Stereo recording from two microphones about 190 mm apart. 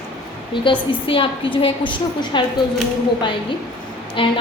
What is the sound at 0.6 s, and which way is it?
A woman's voice, 25° left (ahead or behind).